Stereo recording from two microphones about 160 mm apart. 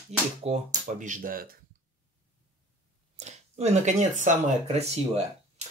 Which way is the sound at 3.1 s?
45° right (ahead or behind).